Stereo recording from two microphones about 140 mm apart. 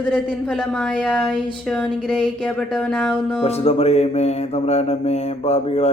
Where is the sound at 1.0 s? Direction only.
5° left (ahead or behind).